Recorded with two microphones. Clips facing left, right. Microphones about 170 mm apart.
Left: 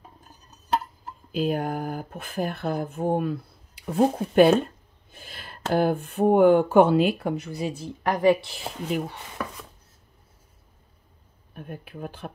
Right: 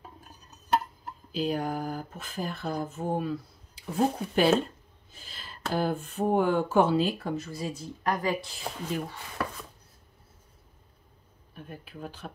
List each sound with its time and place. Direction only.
1.3 s speech: 55° left (ahead or behind); by 9.2 s 70° left (ahead or behind)
11.5 s speech: 55° left (ahead or behind)